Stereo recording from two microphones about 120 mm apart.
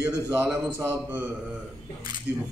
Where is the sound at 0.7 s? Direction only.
15° right (ahead or behind).